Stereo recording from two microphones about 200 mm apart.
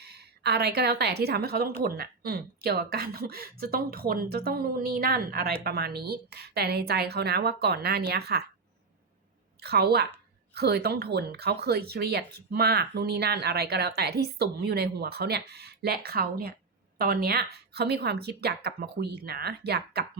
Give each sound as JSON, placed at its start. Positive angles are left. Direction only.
{"t": 0.0, "sound": "a woman's voice", "side_deg": -55}
{"t": 9.6, "sound": "speech", "side_deg": -55}